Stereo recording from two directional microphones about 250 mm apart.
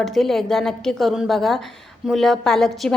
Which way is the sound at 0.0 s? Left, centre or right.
Centre.